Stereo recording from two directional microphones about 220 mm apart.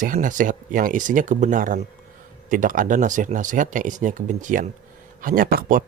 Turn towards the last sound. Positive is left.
turn(degrees=-40)  # may be behind; listen again after turning